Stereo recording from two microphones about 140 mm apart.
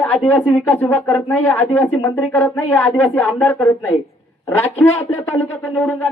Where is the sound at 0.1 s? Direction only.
10° left (ahead or behind).